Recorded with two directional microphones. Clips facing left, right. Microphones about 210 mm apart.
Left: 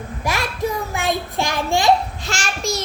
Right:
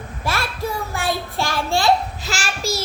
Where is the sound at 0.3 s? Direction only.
15° left (ahead or behind).